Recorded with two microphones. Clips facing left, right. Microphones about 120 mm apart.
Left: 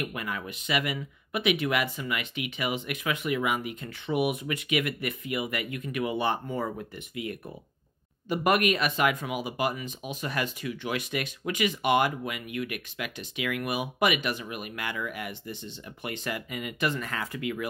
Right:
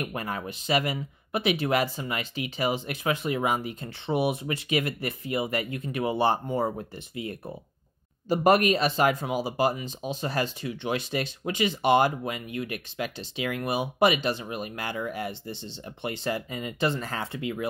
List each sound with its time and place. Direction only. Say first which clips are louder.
0.0 s speech: right 2 dB; 35° right (ahead or behind)